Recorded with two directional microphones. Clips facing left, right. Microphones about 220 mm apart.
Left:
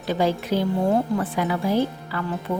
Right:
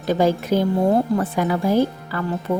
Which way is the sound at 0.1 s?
45° right (ahead or behind).